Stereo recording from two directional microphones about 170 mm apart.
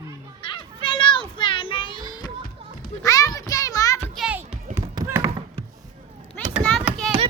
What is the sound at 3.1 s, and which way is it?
Music, 20° left (ahead or behind).